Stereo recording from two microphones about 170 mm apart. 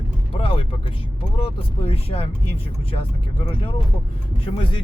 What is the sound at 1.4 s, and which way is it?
Speech, 35° left (ahead or behind).